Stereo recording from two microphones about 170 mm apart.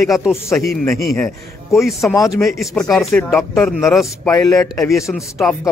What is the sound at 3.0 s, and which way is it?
Speech, 5° left (ahead or behind).